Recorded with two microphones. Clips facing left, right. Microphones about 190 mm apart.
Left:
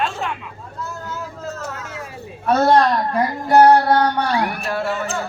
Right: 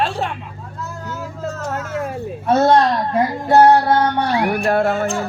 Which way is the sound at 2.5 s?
25° right (ahead or behind).